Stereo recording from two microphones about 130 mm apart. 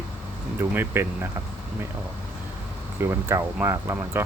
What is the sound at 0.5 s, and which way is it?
Speech, 15° right (ahead or behind).